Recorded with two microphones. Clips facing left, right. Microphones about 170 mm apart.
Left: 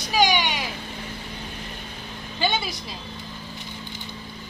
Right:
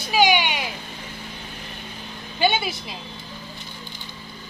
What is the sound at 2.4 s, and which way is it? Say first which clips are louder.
Speech: right 4 dB; 10° right (ahead or behind).